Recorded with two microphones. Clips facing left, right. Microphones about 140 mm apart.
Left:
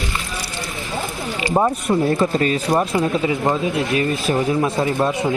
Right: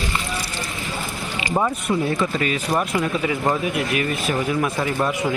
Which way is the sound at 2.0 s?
40° left (ahead or behind).